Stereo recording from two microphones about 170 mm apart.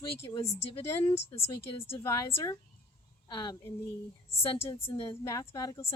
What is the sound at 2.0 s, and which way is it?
A woman's voice, 15° left (ahead or behind).